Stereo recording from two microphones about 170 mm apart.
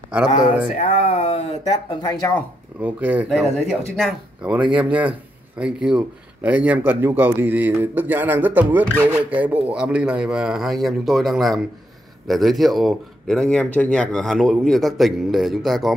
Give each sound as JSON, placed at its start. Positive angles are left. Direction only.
{"t": 0.7, "sound": "speech", "side_deg": 45}
{"t": 2.8, "sound": "speech", "side_deg": -10}
{"t": 3.3, "sound": "speech", "side_deg": 0}